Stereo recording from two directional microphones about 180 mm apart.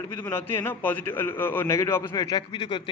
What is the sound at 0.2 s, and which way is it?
A man's voice, 10° left (ahead or behind).